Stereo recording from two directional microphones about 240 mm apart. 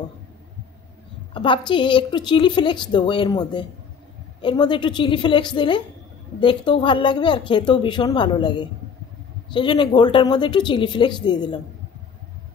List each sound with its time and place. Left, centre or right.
1.3 s a woman's voice: centre